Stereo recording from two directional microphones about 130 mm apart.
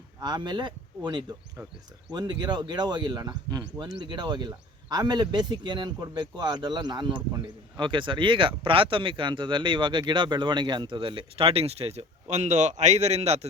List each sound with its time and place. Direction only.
0.2 s speech: 35° right (ahead or behind); by 13.5 s 55° right (ahead or behind)